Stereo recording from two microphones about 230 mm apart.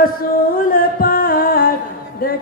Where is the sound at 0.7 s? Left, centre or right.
Left.